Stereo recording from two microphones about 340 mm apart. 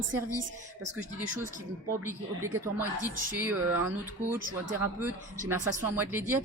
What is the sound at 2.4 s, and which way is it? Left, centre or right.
Speech, centre.